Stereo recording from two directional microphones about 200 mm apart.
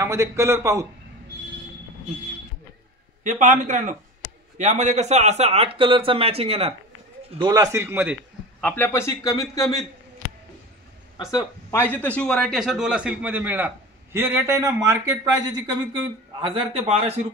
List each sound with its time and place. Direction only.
0.0 s a man's voice: 15° right (ahead or behind)
3.3 s a man's voice: 40° right (ahead or behind); by 8.2 s 10° right (ahead or behind)
8.5 s a man's voice: 10° left (ahead or behind)
11.3 s a man's voice: 10° left (ahead or behind); by 15.1 s 15° right (ahead or behind)
16.3 s speech: 25° right (ahead or behind)